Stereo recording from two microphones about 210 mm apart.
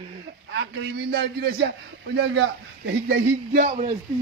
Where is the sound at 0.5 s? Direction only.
55° right (ahead or behind).